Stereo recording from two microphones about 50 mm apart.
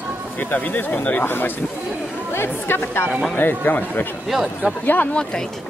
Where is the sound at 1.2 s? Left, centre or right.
Left.